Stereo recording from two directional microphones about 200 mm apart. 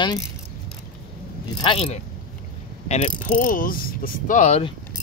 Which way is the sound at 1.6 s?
30° left (ahead or behind).